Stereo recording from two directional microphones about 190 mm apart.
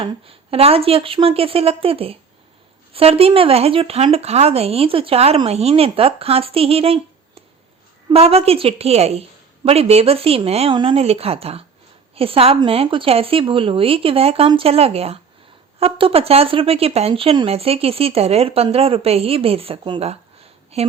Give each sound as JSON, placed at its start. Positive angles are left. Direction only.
{"t": 0.0, "sound": "a woman's voice", "side_deg": -30}